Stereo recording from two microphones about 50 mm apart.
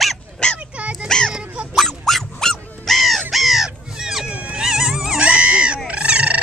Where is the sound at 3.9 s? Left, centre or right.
Centre.